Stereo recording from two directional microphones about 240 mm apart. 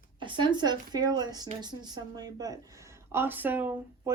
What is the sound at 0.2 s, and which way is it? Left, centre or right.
Speech, centre.